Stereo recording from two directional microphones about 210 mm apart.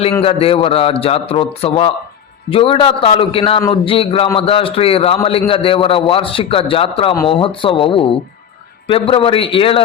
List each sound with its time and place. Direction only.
0.2 s a man's voice: 25° left (ahead or behind)